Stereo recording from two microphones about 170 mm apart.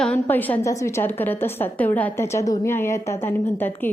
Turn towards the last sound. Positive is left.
turn(degrees=10)  # may be behind; listen again after turning